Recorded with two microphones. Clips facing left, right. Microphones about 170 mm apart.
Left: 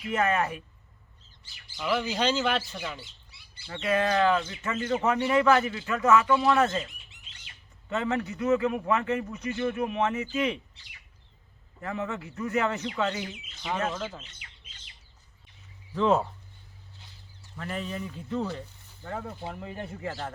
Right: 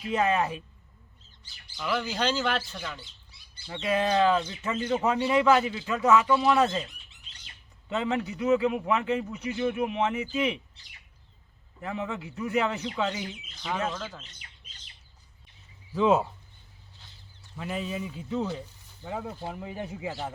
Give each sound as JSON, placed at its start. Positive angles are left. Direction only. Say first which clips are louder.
{"t": 0.1, "sound": "speech", "louder": "right 1 dB", "side_deg": -15}
{"t": 1.8, "sound": "speech", "louder": "left 2 dB", "side_deg": 5}
{"t": 3.7, "sound": "speech", "louder": "even", "side_deg": -20}
{"t": 7.9, "sound": "speech", "louder": "even", "side_deg": -15}
{"t": 11.8, "sound": "speech", "louder": "even", "side_deg": -15}
{"t": 13.9, "sound": "speech", "louder": "left 2 dB", "side_deg": 5}
{"t": 14.3, "sound": "bird", "louder": "even", "side_deg": -40}
{"t": 16.0, "sound": "speech", "louder": "right 1 dB", "side_deg": -5}
{"t": 17.6, "sound": "speech", "louder": "right 1 dB", "side_deg": -10}